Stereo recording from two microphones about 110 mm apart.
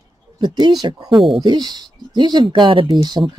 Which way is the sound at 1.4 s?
40° right (ahead or behind).